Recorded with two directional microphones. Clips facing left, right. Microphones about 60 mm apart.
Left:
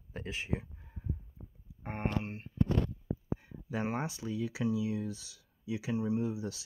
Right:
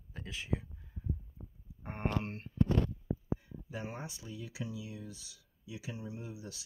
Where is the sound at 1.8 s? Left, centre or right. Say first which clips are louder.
Left 4 dB; left.